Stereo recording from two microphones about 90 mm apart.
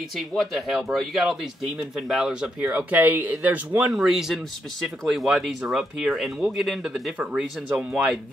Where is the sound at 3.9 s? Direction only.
5° right (ahead or behind).